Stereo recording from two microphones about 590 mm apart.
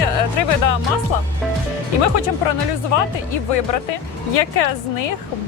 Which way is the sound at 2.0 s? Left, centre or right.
Left.